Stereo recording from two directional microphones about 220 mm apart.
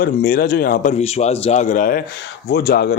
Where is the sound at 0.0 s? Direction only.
40° left (ahead or behind).